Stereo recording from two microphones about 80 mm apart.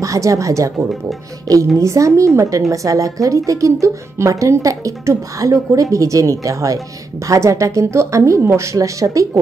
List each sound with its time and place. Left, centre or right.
0.0 s speech: right
1.8 s speech: right